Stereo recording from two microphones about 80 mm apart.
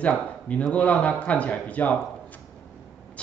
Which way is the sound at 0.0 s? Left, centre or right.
Centre.